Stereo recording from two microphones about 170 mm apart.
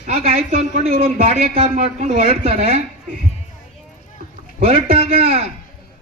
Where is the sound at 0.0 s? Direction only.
40° right (ahead or behind).